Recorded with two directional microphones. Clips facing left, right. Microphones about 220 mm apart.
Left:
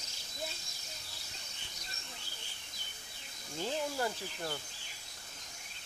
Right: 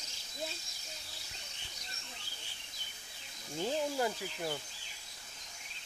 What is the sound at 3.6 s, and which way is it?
Speech, 15° right (ahead or behind).